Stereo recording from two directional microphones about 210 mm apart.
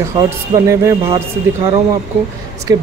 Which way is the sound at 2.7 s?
20° right (ahead or behind).